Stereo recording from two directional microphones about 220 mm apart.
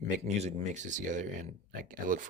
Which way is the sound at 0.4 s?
30° right (ahead or behind).